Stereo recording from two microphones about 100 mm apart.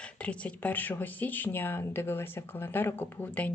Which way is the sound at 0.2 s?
15° left (ahead or behind).